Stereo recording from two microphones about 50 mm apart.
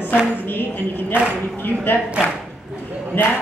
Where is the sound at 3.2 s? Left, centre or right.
Left.